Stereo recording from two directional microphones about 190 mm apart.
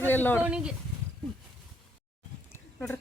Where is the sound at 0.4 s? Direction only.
5° right (ahead or behind).